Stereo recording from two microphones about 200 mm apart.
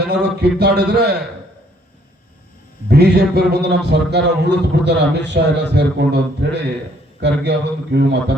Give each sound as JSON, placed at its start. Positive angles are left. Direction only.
{"t": 0.1, "sound": "a man's voice", "side_deg": -55}
{"t": 2.9, "sound": "a man's voice", "side_deg": -55}